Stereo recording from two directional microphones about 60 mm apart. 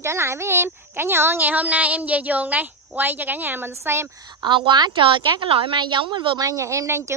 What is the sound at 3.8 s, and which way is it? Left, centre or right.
Speech, right.